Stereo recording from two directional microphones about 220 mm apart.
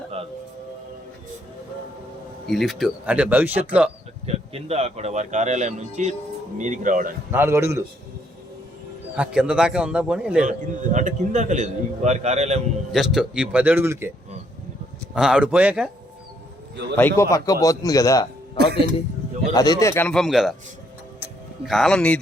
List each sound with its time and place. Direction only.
2.5 s speech: centre (ahead or behind)
4.3 s a man's voice: 30° right (ahead or behind)
7.3 s a man's voice: 10° right (ahead or behind)
9.1 s speech: 5° right (ahead or behind)
10.4 s a man's voice: 35° right (ahead or behind)
12.9 s speech: centre (ahead or behind)
15.1 s speech: 5° right (ahead or behind)
17.0 s a man's voice: 10° left (ahead or behind)
18.5 s speech: 45° right (ahead or behind)
19.5 s a man's voice: 15° left (ahead or behind); by 20.6 s centre (ahead or behind)
21.7 s speech: centre (ahead or behind)